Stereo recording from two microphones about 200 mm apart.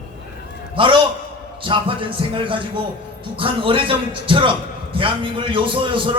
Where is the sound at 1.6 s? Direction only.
25° right (ahead or behind).